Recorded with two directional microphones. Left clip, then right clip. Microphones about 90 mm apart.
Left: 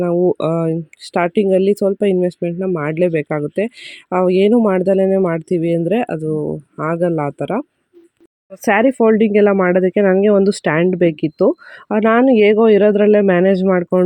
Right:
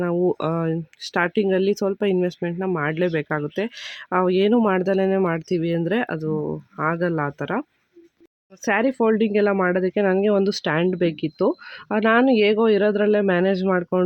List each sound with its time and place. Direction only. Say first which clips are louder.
0.3 s speech: left 6 dB; 45° left (ahead or behind)
8.6 s speech: left 7 dB; 30° left (ahead or behind)
13.7 s speech: left 6 dB; 20° left (ahead or behind)